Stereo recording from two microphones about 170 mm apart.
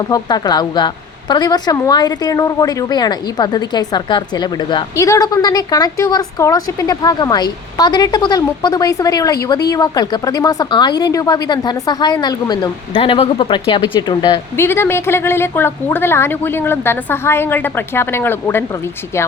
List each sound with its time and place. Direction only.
0.1 s a woman's voice: 25° left (ahead or behind)
14.5 s a woman's voice: 15° left (ahead or behind)